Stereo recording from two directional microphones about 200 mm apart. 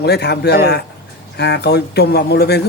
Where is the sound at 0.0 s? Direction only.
55° left (ahead or behind).